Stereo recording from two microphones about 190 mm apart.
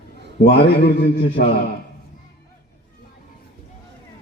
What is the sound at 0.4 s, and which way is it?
A man's voice, 55° left (ahead or behind).